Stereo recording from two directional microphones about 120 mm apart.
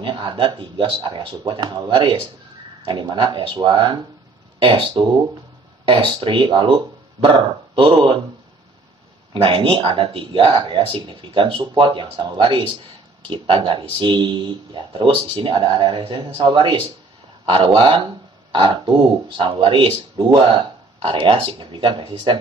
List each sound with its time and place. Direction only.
0.0 s speech: 40° right (ahead or behind)
9.3 s speech: 45° right (ahead or behind)
20.2 s speech: 25° right (ahead or behind)
20.4 s speech: 40° right (ahead or behind)